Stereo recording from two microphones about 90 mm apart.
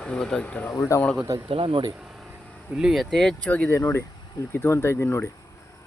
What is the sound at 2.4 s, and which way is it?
Vehicle, 15° left (ahead or behind).